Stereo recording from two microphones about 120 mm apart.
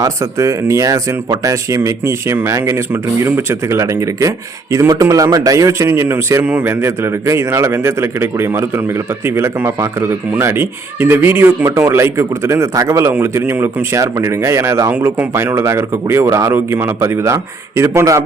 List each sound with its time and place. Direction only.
0.0 s a man's voice: 25° right (ahead or behind)
14.9 s speech: 10° right (ahead or behind)
15.3 s a man's voice: 20° right (ahead or behind)